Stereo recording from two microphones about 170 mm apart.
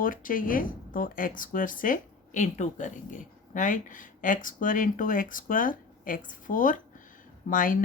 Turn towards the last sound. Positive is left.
turn(degrees=50)  # may be behind; listen again after turning